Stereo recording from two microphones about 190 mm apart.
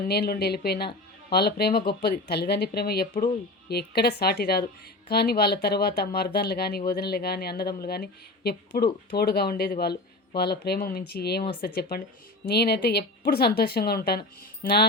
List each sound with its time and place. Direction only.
0.1 s speech: 55° left (ahead or behind)